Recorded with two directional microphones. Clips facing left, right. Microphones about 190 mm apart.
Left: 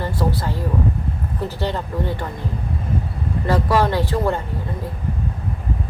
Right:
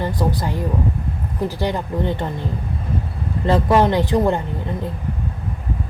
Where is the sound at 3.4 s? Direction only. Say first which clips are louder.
Right 3 dB; 25° right (ahead or behind).